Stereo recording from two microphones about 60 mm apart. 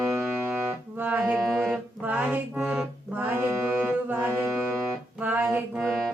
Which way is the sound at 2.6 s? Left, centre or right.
Centre.